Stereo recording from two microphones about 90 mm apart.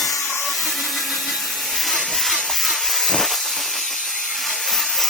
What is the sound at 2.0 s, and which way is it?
Hiss, centre (ahead or behind).